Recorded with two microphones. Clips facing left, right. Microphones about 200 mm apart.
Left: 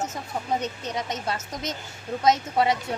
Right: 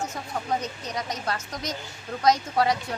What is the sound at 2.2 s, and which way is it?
Speech, 25° left (ahead or behind).